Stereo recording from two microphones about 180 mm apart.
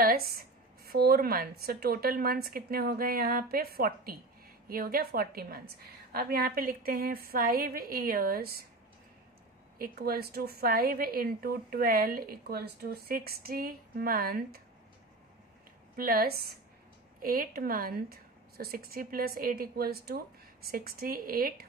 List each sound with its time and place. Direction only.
0.0 s a woman's voice: 55° right (ahead or behind)
9.8 s a woman's voice: 55° right (ahead or behind)
16.0 s a woman's voice: 55° right (ahead or behind)